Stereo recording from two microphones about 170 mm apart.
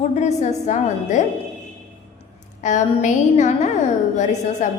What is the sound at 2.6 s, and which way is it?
A woman's voice, 45° left (ahead or behind).